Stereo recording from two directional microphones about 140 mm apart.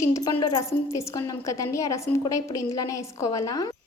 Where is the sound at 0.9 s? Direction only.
20° left (ahead or behind).